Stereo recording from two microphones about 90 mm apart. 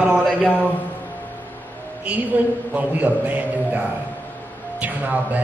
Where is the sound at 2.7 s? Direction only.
15° right (ahead or behind).